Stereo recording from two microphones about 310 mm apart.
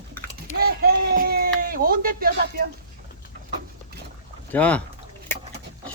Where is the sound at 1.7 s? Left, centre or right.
Right.